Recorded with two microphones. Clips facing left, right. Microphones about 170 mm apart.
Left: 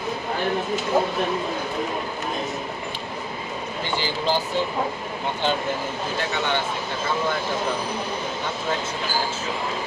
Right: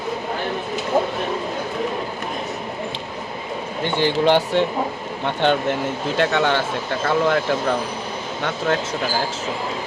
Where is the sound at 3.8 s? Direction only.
60° right (ahead or behind); by 7.4 s 80° right.